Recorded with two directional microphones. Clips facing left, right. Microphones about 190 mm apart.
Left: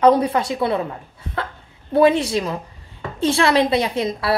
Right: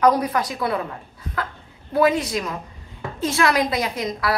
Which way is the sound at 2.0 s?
30° left (ahead or behind).